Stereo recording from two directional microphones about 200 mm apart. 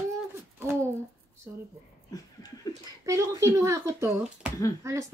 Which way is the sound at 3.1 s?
15° right (ahead or behind).